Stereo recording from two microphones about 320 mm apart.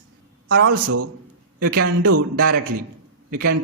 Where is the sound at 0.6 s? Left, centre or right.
Right.